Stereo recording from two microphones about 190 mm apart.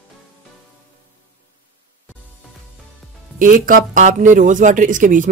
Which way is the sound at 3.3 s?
45° right (ahead or behind).